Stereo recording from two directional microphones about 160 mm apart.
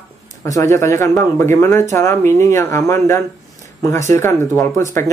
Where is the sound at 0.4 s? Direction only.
20° left (ahead or behind).